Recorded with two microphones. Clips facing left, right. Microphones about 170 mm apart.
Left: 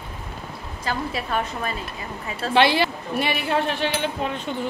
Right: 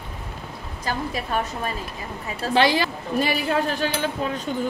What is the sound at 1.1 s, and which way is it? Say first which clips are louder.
A woman's voice: even; 40° right (ahead or behind).